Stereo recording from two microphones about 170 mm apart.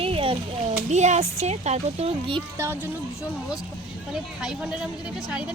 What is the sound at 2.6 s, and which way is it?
Speech, 15° right (ahead or behind).